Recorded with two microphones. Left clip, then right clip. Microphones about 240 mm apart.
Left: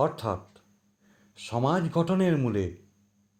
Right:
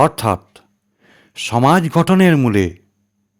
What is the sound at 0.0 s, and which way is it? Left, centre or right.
Speech, right.